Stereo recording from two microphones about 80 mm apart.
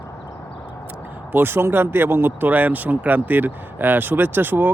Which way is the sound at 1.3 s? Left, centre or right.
Right.